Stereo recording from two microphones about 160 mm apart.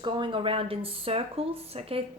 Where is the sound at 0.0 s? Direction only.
30° right (ahead or behind).